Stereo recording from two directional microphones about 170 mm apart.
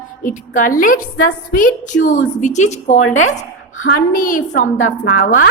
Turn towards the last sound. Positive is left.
turn(degrees=60)  # may be behind; listen again after turning